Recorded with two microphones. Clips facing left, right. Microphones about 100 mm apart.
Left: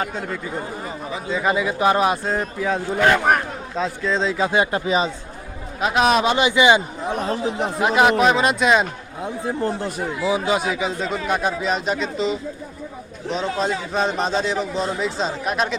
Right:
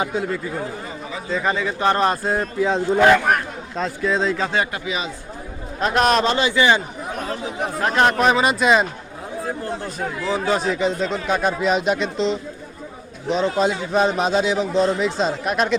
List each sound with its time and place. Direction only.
0.0 s a man's voice: 5° right (ahead or behind)
2.6 s speech: 20° right (ahead or behind)
3.8 s a man's voice: centre (ahead or behind)
4.4 s speech: 10° left (ahead or behind)
4.7 s speech: 35° left (ahead or behind)
5.8 s a man's voice: 5° left (ahead or behind)
6.3 s speech: 15° left (ahead or behind)
7.1 s speech: 30° left (ahead or behind)
7.8 s speech: 10° left (ahead or behind)
8.2 s a man's voice: centre (ahead or behind)
10.0 s a man's voice: 5° left (ahead or behind)